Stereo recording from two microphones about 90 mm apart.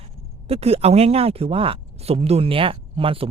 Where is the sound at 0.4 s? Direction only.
90° right.